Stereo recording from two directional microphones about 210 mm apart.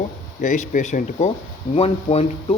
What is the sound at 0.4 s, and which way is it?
A man's voice, 35° left (ahead or behind).